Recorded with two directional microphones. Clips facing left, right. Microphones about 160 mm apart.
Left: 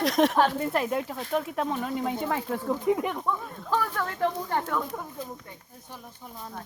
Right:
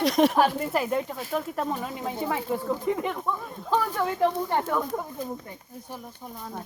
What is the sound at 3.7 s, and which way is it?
Speech, 15° right (ahead or behind).